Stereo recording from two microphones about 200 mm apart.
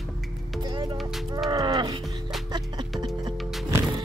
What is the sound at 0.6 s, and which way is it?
A woman's voice, 20° right (ahead or behind).